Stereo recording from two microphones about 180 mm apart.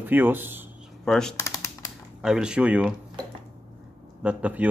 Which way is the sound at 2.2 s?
5° right (ahead or behind).